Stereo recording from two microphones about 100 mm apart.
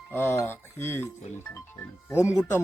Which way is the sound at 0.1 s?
25° left (ahead or behind).